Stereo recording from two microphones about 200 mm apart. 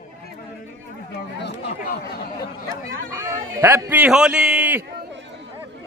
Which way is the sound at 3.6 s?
10° right (ahead or behind).